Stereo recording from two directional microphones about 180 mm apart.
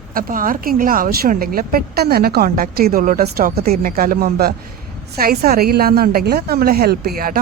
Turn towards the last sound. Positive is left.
turn(degrees=-55)  # may be behind; listen again after turning